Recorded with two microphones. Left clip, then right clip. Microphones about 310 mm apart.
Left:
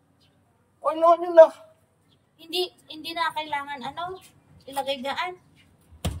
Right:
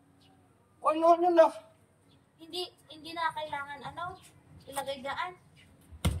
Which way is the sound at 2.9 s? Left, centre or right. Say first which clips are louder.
Left 3 dB; left.